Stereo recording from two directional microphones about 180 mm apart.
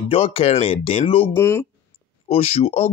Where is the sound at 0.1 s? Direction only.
35° left (ahead or behind).